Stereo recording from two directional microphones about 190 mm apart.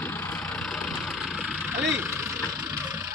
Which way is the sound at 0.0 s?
10° left (ahead or behind).